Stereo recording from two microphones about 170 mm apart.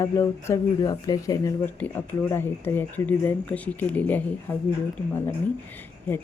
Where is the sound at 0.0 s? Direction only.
15° left (ahead or behind).